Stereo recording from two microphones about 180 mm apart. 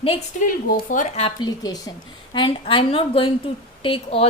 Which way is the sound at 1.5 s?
20° left (ahead or behind).